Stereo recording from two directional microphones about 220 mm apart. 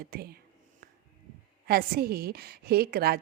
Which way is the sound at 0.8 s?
40° right (ahead or behind).